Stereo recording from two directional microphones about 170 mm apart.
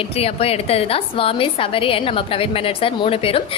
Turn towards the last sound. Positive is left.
turn(degrees=35)  # may be behind; listen again after turning